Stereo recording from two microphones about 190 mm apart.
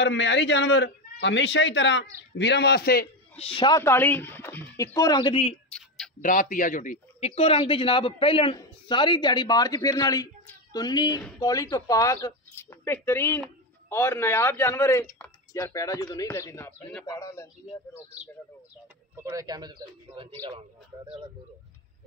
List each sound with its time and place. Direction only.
0.0 s a man's voice: 70° left (ahead or behind)
3.3 s speech: 30° left (ahead or behind)
3.8 s speech: 10° left (ahead or behind); by 5.6 s 30° left (ahead or behind)
5.7 s clicking: 5° left (ahead or behind)
6.2 s speech: 45° left (ahead or behind); by 17.5 s 15° left (ahead or behind)
19.1 s a man's voice: 15° right (ahead or behind)